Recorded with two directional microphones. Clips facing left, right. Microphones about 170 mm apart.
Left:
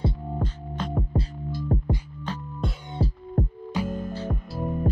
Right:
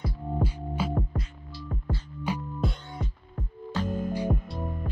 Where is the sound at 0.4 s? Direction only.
10° right (ahead or behind).